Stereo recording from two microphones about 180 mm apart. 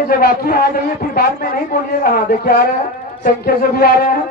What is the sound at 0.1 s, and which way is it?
A man's voice, 55° left (ahead or behind).